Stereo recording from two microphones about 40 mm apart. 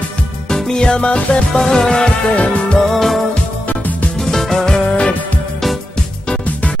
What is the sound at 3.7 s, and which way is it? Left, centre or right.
Music, left.